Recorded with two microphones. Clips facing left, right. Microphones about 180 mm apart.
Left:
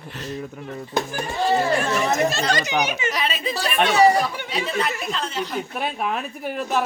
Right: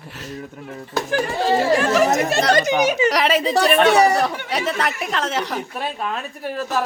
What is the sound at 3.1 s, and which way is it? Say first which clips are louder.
Speech: right 8 dB; 85° right.